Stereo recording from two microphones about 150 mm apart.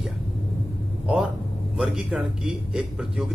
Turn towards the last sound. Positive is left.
turn(degrees=-5)  # may be behind; listen again after turning